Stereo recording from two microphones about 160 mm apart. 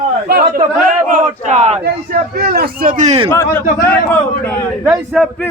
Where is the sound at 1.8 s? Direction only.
75° right (ahead or behind); by 3.2 s 50° right (ahead or behind).